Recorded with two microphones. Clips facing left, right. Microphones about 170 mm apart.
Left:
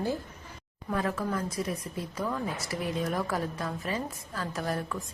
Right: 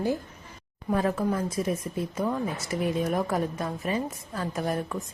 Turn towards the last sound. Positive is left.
turn(degrees=-20)  # may be behind; listen again after turning